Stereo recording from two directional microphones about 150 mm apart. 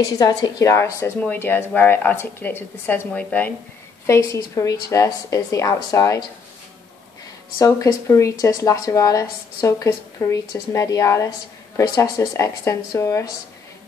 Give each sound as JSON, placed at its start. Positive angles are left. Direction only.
{"t": 0.0, "sound": "speech", "side_deg": 25}
{"t": 7.5, "sound": "speech", "side_deg": 20}